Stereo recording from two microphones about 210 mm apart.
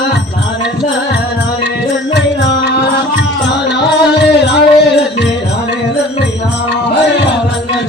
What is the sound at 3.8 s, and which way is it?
Music, 55° left (ahead or behind).